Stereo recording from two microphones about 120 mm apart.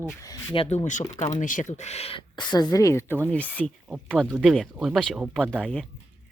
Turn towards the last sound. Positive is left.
turn(degrees=5)  # may be behind; listen again after turning